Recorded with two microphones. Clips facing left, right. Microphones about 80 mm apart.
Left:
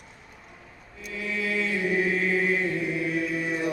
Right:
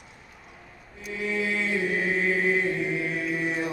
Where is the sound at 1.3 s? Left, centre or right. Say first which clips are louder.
Even; right.